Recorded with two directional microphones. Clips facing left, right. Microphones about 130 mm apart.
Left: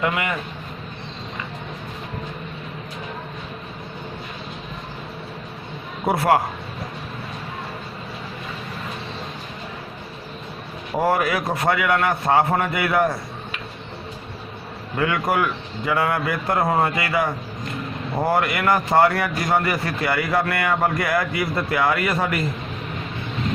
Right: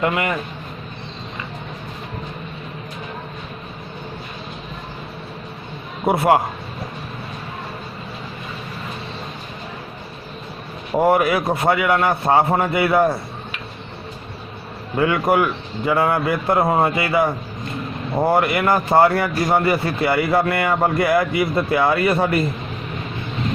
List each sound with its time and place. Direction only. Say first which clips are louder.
0.0 s speech: right 3 dB; 35° right (ahead or behind)
6.1 s a man's voice: right 3 dB; 25° right (ahead or behind)
11.0 s a man's voice: right 4 dB; 25° right (ahead or behind)
14.9 s a man's voice: right 4 dB; 25° right (ahead or behind)